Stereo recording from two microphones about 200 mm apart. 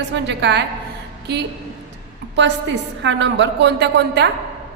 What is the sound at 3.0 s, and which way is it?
A woman's voice, 65° right (ahead or behind).